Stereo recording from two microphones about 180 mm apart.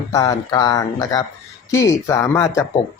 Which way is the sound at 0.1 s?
20° left (ahead or behind).